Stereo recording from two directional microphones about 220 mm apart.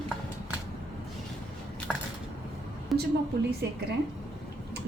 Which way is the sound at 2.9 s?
Centre (ahead or behind).